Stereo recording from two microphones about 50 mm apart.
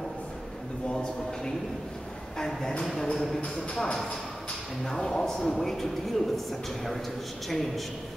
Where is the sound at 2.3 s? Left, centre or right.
Centre.